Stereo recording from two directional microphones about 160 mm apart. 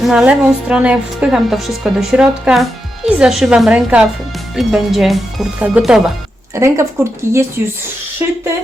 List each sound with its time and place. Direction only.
0.0 s a woman's voice: 5° right (ahead or behind)